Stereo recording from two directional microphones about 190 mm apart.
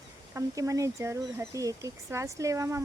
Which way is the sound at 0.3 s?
15° right (ahead or behind).